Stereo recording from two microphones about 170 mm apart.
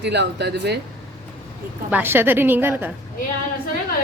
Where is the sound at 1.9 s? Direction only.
10° right (ahead or behind).